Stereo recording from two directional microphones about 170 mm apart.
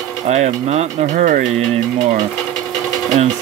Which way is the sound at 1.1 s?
55° right (ahead or behind).